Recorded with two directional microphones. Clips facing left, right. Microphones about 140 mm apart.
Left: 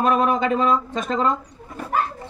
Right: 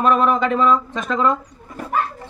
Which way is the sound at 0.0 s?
40° left (ahead or behind).